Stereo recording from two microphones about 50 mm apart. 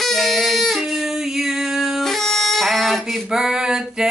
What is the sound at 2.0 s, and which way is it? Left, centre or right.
Music, centre.